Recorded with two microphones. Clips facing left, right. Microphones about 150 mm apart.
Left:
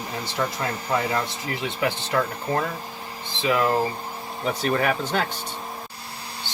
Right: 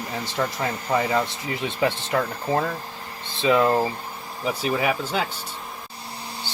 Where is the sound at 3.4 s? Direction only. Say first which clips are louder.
Right 3 dB; 25° right (ahead or behind).